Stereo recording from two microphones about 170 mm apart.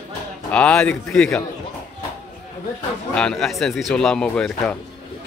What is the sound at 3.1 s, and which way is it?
Speech, 5° left (ahead or behind).